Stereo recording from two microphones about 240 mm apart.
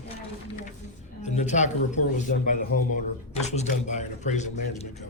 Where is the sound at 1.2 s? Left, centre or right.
Left.